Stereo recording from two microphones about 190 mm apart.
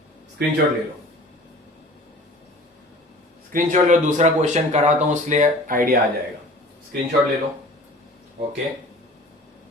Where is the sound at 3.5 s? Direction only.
40° right (ahead or behind).